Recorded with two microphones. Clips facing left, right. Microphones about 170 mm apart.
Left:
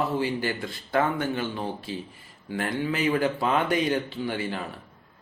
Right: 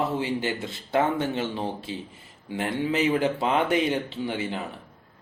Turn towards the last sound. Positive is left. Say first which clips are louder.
# even
turn(degrees=-20)  # may be behind; listen again after turning